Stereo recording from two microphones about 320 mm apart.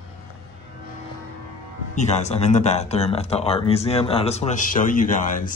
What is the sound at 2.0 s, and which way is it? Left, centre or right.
Speech, left.